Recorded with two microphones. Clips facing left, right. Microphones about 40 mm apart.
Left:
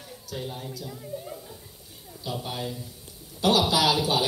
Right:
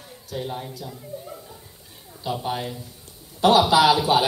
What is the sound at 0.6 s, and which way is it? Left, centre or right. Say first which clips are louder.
Speech: right 1 dB; right.